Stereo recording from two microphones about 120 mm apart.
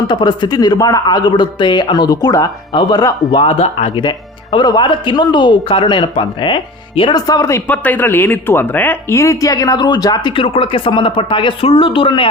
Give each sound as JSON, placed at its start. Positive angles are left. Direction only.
{"t": 0.1, "sound": "speech", "side_deg": 40}
{"t": 3.3, "sound": "speech", "side_deg": 55}
{"t": 4.5, "sound": "speech", "side_deg": 35}
{"t": 7.7, "sound": "speech", "side_deg": 15}
{"t": 10.3, "sound": "speech", "side_deg": 45}